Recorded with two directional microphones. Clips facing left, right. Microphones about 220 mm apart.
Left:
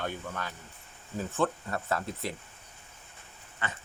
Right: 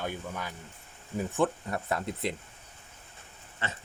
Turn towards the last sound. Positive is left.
turn(degrees=-25)  # may be behind; listen again after turning